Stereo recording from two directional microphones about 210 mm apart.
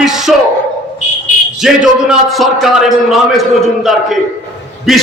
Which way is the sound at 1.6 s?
5° right (ahead or behind).